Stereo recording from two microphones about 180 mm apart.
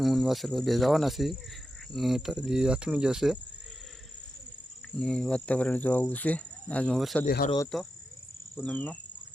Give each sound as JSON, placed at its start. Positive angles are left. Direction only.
{"t": 0.0, "sound": "cricket", "side_deg": 0}
{"t": 4.9, "sound": "speech", "side_deg": 5}
{"t": 7.3, "sound": "speech", "side_deg": 60}
{"t": 7.7, "sound": "cricket", "side_deg": 0}
{"t": 8.5, "sound": "speech", "side_deg": 5}